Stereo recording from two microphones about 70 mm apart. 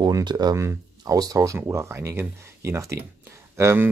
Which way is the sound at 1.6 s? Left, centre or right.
Right.